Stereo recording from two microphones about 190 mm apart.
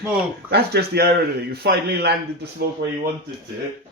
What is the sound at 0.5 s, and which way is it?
A man's voice, 55° right (ahead or behind).